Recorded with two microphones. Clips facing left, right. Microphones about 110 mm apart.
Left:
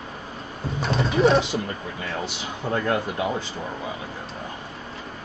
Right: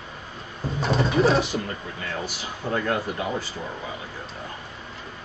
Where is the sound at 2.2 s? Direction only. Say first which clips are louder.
Left 2 dB; 20° left (ahead or behind).